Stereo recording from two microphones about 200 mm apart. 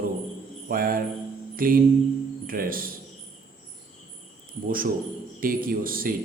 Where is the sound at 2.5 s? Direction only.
45° right (ahead or behind).